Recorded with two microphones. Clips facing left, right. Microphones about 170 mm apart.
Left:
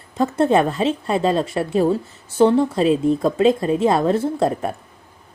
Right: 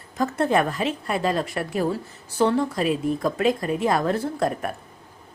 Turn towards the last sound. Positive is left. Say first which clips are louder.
# left 5 dB
turn(degrees=25)  # may be behind; listen again after turning